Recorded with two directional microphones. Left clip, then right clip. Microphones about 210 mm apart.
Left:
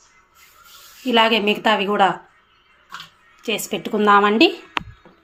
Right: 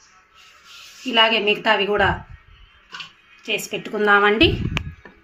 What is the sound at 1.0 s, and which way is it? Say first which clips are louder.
A woman's voice: left 1 dB; 40° left (ahead or behind).